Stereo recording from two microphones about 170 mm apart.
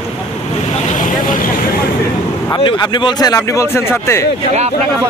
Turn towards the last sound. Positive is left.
turn(degrees=15)  # may be behind; listen again after turning